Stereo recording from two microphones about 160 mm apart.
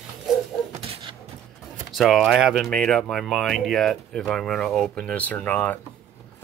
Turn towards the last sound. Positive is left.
turn(degrees=10)  # may be behind; listen again after turning